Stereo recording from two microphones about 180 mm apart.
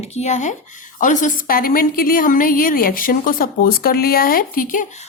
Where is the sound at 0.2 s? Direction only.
40° left (ahead or behind).